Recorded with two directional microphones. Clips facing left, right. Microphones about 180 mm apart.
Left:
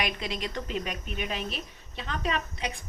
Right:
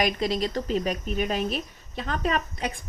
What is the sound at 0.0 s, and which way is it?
A woman's voice, 40° right (ahead or behind).